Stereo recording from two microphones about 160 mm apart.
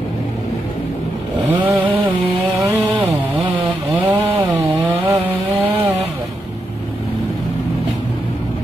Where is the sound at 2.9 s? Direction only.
30° right (ahead or behind).